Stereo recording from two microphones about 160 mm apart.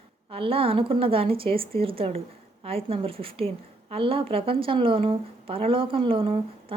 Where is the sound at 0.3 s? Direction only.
35° right (ahead or behind).